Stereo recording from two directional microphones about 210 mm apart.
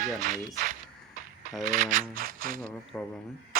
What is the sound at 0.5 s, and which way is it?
Speech, 45° right (ahead or behind).